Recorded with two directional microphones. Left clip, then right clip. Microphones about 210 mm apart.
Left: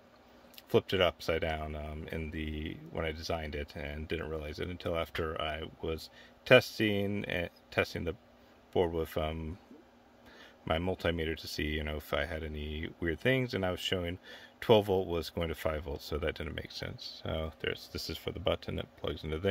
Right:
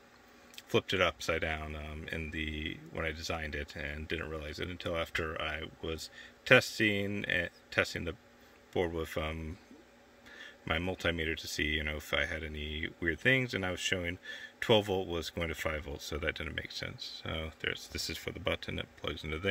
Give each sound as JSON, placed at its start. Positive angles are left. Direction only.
{"t": 0.6, "sound": "speech", "side_deg": 15}